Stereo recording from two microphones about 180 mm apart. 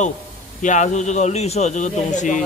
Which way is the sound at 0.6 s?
45° left (ahead or behind).